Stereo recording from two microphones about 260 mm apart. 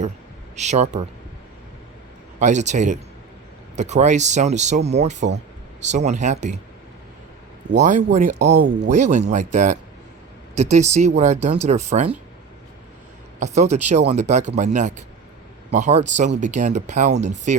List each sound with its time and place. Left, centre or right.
0.5 s speech: right
2.4 s speech: right
7.7 s speech: right
13.4 s speech: right